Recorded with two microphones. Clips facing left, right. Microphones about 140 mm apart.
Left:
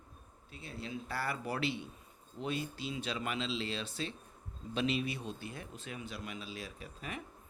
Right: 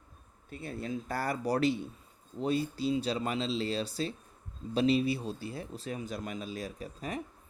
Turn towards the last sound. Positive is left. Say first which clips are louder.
# right 6 dB
turn(degrees=-35)  # may be behind; listen again after turning